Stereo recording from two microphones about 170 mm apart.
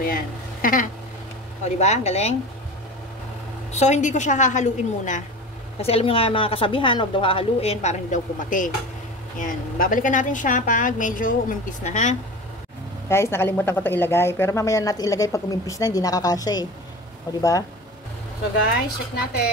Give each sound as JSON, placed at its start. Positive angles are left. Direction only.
{"t": 0.0, "sound": "a sound", "side_deg": 55}
{"t": 1.6, "sound": "a woman's voice", "side_deg": 40}
{"t": 3.7, "sound": "a woman's voice", "side_deg": 45}
{"t": 5.8, "sound": "a woman's voice", "side_deg": 35}
{"t": 13.1, "sound": "speech", "side_deg": 15}